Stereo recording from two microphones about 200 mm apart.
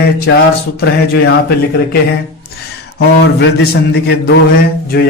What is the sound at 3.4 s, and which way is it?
A man's voice, 55° left (ahead or behind).